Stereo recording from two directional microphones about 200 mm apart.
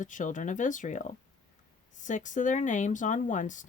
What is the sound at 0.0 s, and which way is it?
Speech, 40° left (ahead or behind).